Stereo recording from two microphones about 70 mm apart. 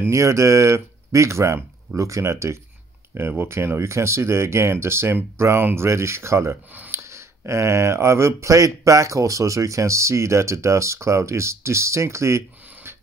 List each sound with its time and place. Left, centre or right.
0.0 s speech: right
12.9 s printer: right